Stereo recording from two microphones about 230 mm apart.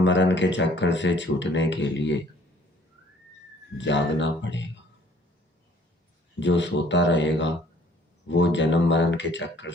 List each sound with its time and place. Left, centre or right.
0.0 s speech: left
3.8 s speech: left
6.4 s speech: left